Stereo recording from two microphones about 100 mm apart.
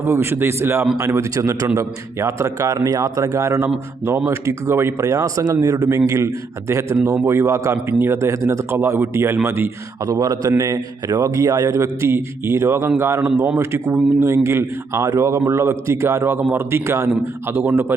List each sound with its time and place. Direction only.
0.0 s a man's voice: 25° right (ahead or behind)